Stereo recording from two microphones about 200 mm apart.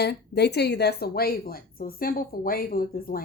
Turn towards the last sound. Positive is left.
turn(degrees=45)  # may be behind; listen again after turning